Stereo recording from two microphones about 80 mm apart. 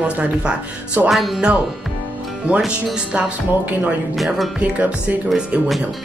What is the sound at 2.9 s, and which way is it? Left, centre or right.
Speech, centre.